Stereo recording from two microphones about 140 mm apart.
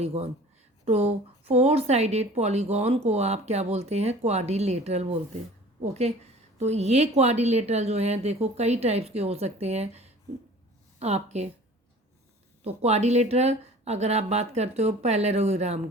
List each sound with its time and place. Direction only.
0.0 s speech: 45° right (ahead or behind)
12.6 s speech: 50° right (ahead or behind)